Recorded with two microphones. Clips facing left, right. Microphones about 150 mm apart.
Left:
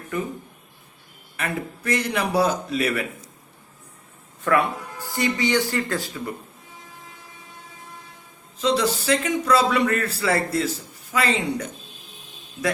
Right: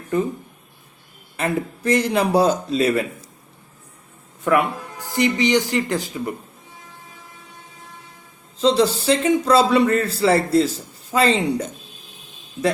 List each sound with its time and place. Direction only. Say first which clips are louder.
1.4 s a man's voice: right 6 dB; 30° right (ahead or behind)
4.4 s a man's voice: right 2 dB; 20° right (ahead or behind)
8.6 s a man's voice: right 5 dB; 30° right (ahead or behind)